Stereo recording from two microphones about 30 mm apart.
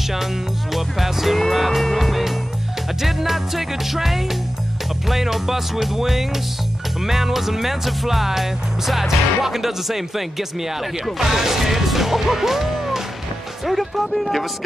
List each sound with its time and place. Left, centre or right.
0.7 s speech: centre
1.5 s music: centre
3.0 s speech: centre
11.1 s music: centre
13.7 s speech: centre